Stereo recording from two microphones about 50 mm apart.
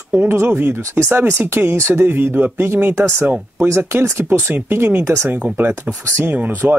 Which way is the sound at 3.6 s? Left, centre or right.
Right.